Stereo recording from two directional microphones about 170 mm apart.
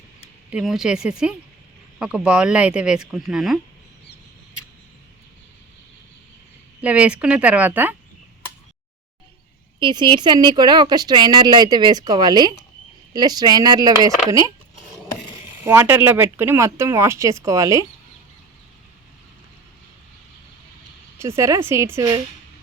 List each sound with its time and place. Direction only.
0.5 s speech: 5° right (ahead or behind)
6.8 s speech: 10° right (ahead or behind)
9.8 s a woman's voice: 25° right (ahead or behind)
15.6 s speech: 15° right (ahead or behind)
21.2 s speech: 15° right (ahead or behind)